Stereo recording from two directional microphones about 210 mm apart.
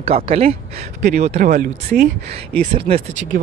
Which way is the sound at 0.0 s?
30° right (ahead or behind).